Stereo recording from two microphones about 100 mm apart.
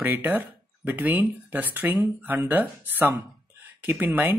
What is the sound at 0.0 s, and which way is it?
Speech, 20° right (ahead or behind).